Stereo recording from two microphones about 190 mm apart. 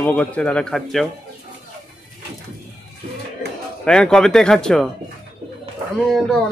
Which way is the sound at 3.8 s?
5° left (ahead or behind).